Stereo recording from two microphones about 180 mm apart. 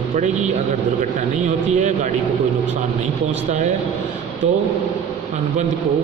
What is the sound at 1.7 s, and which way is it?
Speech, 40° right (ahead or behind).